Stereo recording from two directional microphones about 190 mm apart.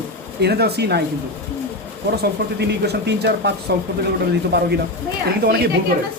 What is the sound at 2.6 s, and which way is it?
Speech, 60° right (ahead or behind).